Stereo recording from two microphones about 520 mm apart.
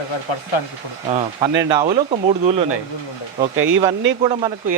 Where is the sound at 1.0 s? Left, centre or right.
Centre.